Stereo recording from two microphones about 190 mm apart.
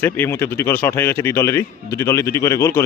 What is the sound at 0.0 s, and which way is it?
A man's voice, 10° left (ahead or behind).